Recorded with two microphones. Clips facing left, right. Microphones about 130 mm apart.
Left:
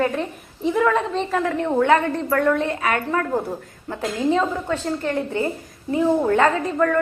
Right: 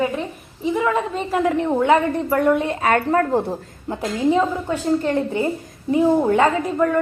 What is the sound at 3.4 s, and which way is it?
A woman's voice, 20° right (ahead or behind).